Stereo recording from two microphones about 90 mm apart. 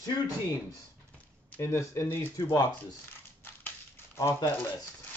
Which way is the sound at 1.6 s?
35° left (ahead or behind).